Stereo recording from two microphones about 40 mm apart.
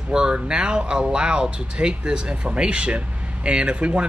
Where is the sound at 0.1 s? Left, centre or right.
Right.